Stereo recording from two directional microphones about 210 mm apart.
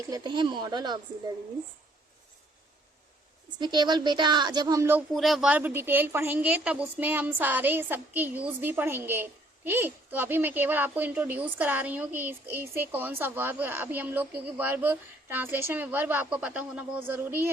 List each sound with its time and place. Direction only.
0.0 s a woman's voice: 20° right (ahead or behind)
3.6 s a woman's voice: 20° right (ahead or behind)
5.1 s a woman's voice: centre (ahead or behind)